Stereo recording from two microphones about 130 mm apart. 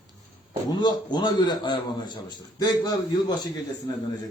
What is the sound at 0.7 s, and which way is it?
A man's voice, 30° left (ahead or behind).